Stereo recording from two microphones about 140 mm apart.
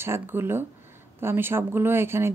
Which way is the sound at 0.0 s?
15° right (ahead or behind).